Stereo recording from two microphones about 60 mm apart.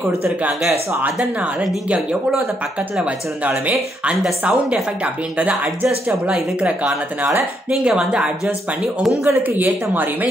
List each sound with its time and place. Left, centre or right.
3.0 s speech: right
7.8 s speech: centre
9.2 s speech: right